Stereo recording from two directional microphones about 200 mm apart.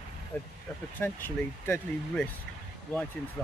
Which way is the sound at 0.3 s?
5° left (ahead or behind).